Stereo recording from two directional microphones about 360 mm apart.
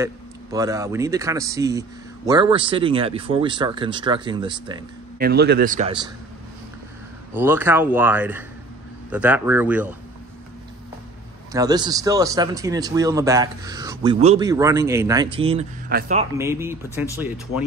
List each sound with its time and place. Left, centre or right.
0.0 s speech: centre
5.2 s a man's voice: right
7.3 s speech: centre
11.5 s speech: centre
16.3 s speech: centre